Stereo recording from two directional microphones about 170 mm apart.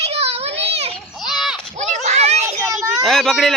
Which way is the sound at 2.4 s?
15° right (ahead or behind).